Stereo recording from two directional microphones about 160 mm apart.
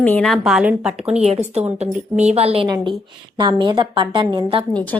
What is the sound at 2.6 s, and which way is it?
A woman's voice, 25° right (ahead or behind).